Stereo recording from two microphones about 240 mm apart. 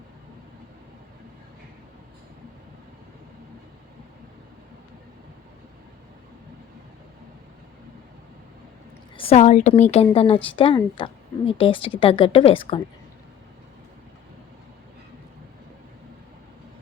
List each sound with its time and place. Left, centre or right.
9.1 s a woman's voice: left